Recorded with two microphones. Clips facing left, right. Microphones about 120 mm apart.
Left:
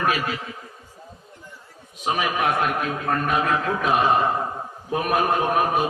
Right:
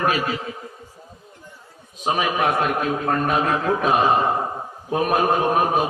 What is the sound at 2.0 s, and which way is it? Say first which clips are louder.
A man's voice: right 2 dB; 30° right (ahead or behind).